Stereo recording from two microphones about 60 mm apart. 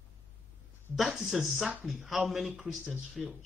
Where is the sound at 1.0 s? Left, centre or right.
Centre.